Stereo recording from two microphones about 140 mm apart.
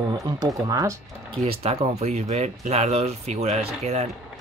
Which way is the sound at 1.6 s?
45° right (ahead or behind).